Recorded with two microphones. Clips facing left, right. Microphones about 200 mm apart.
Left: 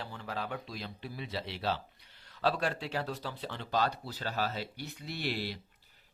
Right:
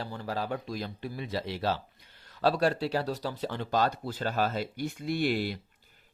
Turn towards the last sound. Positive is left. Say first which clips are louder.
# right 8 dB
turn(degrees=-50)  # may be behind; listen again after turning